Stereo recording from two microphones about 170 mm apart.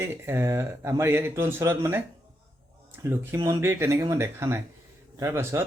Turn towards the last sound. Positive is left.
turn(degrees=-15)  # may be behind; listen again after turning